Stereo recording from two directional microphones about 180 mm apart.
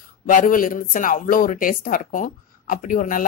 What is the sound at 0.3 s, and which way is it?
Speech, 45° left (ahead or behind).